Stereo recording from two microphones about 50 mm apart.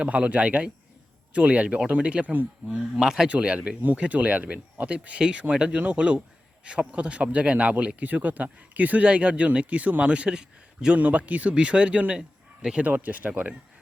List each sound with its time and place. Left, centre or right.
0.0 s speech: right
2.9 s speech: centre
3.2 s speech: right
11.0 s speech: right